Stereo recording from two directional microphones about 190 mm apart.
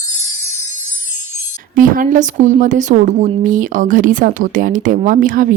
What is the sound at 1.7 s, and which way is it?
Speech, 45° right (ahead or behind).